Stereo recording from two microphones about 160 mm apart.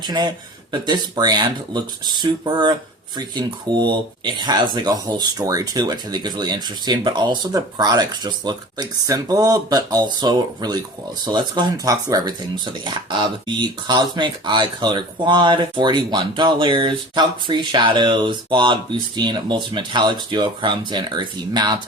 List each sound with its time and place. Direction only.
0.0 s speech: 25° right (ahead or behind)